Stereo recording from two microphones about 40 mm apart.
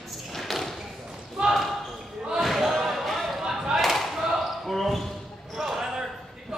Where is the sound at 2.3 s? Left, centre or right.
Centre.